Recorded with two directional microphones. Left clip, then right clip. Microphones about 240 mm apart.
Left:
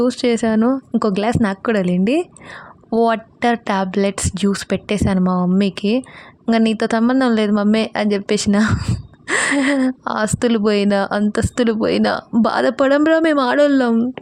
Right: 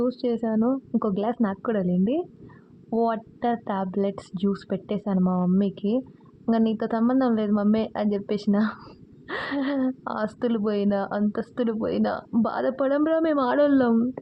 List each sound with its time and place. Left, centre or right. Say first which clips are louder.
0.0 s speech: left 9 dB; left